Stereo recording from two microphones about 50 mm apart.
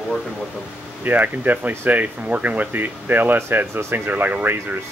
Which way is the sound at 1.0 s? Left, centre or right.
Right.